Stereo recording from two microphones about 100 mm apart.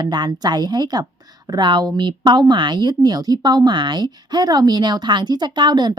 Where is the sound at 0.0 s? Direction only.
45° right (ahead or behind).